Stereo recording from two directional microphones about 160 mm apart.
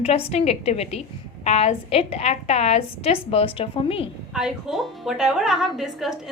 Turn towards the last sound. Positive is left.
turn(degrees=0)  # may be behind; listen again after turning